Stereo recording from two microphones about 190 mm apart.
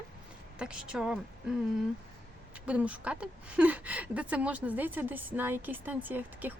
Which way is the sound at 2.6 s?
5° right (ahead or behind).